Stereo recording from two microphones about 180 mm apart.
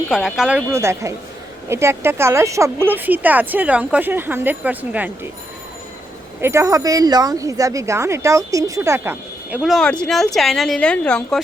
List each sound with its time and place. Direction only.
0.1 s speech: centre (ahead or behind)
6.4 s speech: 15° right (ahead or behind)
9.6 s speech: centre (ahead or behind)